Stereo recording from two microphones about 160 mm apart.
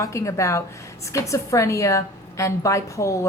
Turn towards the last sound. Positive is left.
turn(degrees=20)  # may be behind; listen again after turning